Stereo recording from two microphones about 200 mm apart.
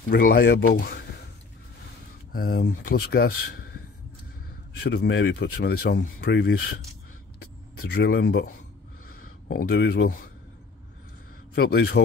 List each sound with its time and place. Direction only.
0.1 s speech: 50° left (ahead or behind)
2.3 s speech: 50° left (ahead or behind)
4.8 s speech: 55° left (ahead or behind)
7.9 s speech: 55° left (ahead or behind)
9.5 s speech: 50° left (ahead or behind)
11.5 s speech: 50° left (ahead or behind)